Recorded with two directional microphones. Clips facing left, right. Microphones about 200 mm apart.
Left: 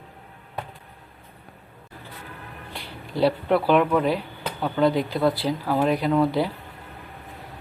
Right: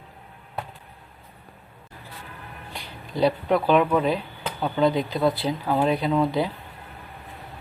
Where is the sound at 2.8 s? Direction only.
15° right (ahead or behind).